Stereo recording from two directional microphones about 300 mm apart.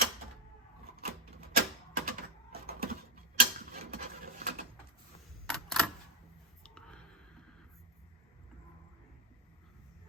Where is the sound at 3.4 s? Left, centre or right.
Right.